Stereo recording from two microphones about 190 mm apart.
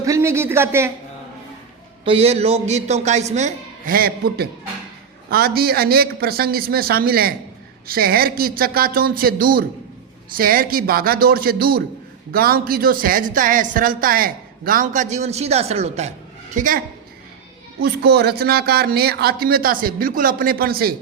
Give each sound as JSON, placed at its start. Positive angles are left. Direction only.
{"t": 0.0, "sound": "speech", "side_deg": -15}
{"t": 2.0, "sound": "a man's voice", "side_deg": -30}
{"t": 16.6, "sound": "a woman's voice", "side_deg": -45}
{"t": 17.7, "sound": "a woman's voice", "side_deg": -55}